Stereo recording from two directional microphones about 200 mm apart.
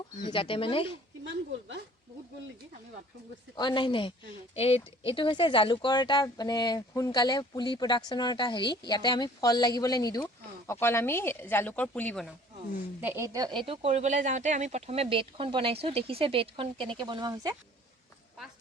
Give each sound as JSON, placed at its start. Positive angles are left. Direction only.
{"t": 0.3, "sound": "speech", "side_deg": 25}
{"t": 3.5, "sound": "speech", "side_deg": 20}
{"t": 13.0, "sound": "speech", "side_deg": -10}